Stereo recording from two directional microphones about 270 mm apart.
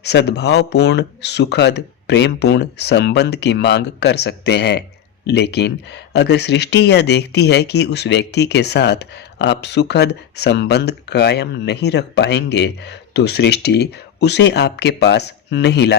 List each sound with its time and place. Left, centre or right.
0.0 s speech: left